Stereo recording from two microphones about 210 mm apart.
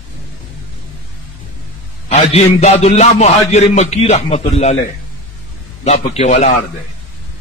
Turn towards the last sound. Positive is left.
turn(degrees=35)  # may be behind; listen again after turning